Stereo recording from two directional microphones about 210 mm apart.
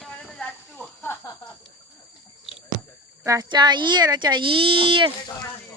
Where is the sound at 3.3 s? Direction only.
20° right (ahead or behind).